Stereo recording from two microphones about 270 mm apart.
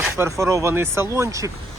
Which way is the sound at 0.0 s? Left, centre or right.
Centre.